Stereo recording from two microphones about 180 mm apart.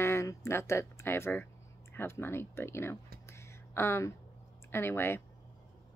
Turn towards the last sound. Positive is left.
turn(degrees=10)  # may be behind; listen again after turning